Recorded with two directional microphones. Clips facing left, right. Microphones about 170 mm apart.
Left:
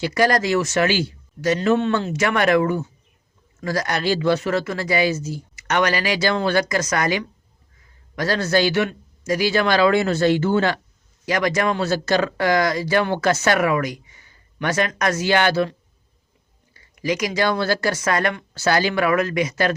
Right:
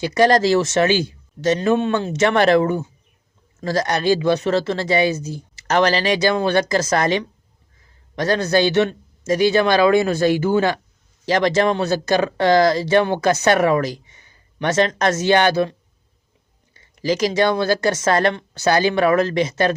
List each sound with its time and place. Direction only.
0.0 s speech: 25° right (ahead or behind)
5.5 s a man's voice: 30° right (ahead or behind)
11.3 s speech: 30° right (ahead or behind)
13.6 s speech: 30° right (ahead or behind)
16.7 s speech: 30° right (ahead or behind)